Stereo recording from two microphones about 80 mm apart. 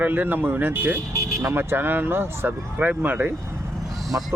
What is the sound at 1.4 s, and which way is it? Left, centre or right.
Speech, right.